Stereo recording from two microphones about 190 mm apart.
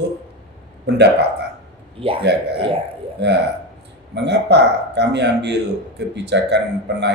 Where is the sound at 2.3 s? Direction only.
60° right (ahead or behind).